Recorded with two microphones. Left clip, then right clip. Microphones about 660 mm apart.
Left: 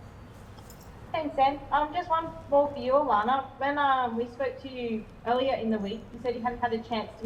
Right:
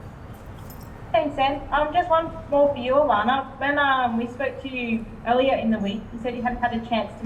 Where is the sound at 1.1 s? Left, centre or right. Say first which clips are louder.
Right 4 dB; left.